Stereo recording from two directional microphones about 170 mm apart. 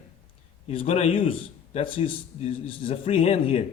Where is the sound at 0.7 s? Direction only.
35° left (ahead or behind).